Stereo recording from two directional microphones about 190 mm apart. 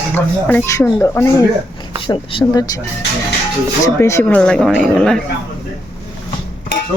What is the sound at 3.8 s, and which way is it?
Speech, 15° left (ahead or behind).